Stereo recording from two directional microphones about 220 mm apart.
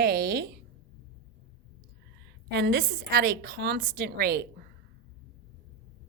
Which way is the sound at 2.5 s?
45° right (ahead or behind).